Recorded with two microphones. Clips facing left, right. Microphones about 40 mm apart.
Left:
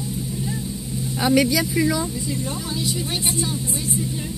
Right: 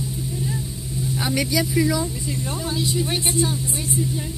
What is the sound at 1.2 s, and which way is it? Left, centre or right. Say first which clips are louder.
Speech: left 5 dB; left.